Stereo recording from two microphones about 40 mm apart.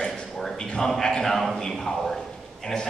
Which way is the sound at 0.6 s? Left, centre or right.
Centre.